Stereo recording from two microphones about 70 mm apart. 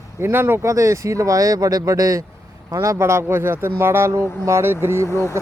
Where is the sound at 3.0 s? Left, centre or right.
Right.